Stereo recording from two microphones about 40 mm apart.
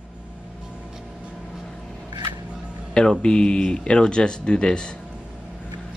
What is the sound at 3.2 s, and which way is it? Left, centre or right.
Speech, left.